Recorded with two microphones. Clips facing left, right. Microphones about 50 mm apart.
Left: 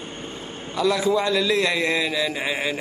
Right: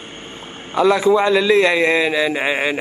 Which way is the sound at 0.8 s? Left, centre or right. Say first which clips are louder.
Right 7 dB; right.